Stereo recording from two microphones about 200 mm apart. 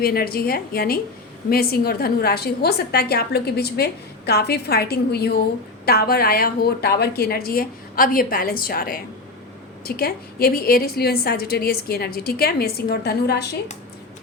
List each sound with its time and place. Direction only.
0.0 s a woman's voice: 50° left (ahead or behind)